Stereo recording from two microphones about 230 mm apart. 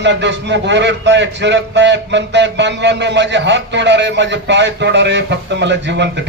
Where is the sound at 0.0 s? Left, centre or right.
Right.